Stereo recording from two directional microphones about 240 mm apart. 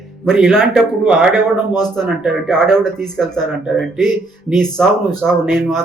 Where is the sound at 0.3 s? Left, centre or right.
Centre.